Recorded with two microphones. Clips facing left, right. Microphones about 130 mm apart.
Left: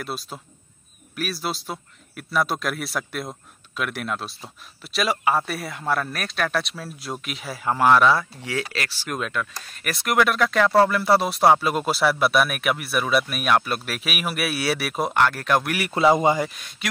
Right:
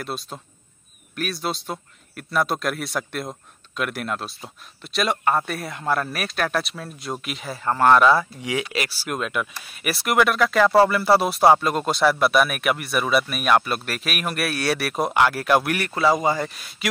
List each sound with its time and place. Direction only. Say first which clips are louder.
0.0 s speech: right 1 dB; centre (ahead or behind)
8.5 s speech: right 2 dB; 15° right (ahead or behind)
15.9 s a man's voice: left 3 dB; 20° left (ahead or behind)
16.4 s speech: even; centre (ahead or behind)